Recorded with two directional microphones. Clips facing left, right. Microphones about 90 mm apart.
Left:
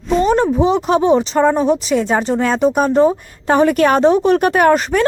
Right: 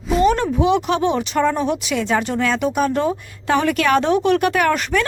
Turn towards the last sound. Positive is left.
turn(degrees=40)  # may be behind; listen again after turning